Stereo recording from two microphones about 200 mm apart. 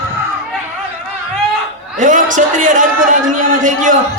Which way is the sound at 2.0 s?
40° right (ahead or behind).